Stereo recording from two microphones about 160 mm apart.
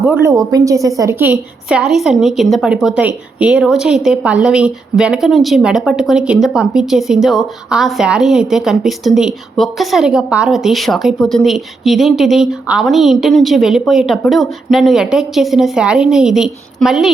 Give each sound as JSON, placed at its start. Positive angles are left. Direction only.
{"t": 0.2, "sound": "a woman's voice", "side_deg": -20}
{"t": 1.8, "sound": "speech", "side_deg": 0}